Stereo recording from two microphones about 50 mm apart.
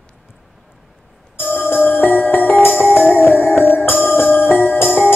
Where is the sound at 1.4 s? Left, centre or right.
Left.